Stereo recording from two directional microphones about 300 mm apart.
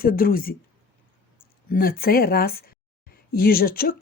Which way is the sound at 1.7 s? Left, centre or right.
Left.